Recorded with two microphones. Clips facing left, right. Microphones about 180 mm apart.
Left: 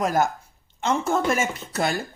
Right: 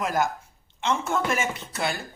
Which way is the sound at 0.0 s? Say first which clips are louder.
Left 3 dB; 40° left (ahead or behind).